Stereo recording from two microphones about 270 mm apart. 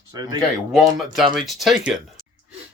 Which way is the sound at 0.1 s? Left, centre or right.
Centre.